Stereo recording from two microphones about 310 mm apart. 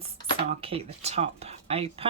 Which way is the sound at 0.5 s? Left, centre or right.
Centre.